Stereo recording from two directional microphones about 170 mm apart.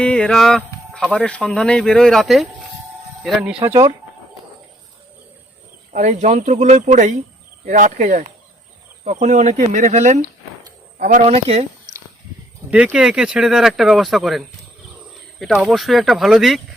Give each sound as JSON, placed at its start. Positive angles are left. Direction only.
{"t": 0.0, "sound": "speech", "side_deg": 5}
{"t": 5.9, "sound": "speech", "side_deg": -45}
{"t": 12.7, "sound": "speech", "side_deg": -5}